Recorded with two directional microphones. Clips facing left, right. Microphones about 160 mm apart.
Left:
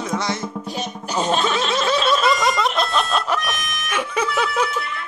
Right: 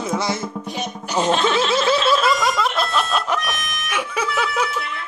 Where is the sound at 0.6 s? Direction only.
15° right (ahead or behind).